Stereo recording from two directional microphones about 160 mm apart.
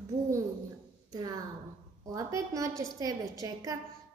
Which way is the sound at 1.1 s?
25° right (ahead or behind).